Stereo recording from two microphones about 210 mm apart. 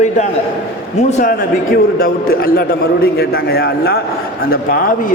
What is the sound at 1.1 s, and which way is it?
A man's voice, 35° left (ahead or behind).